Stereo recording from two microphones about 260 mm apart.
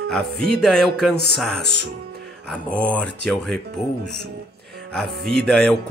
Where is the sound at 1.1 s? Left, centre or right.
Left.